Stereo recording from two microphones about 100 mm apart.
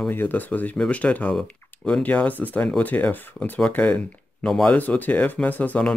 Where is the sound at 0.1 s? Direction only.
20° left (ahead or behind).